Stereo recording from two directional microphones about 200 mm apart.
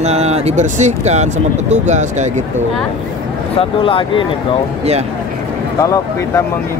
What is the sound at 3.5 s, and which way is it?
Speech, 25° left (ahead or behind).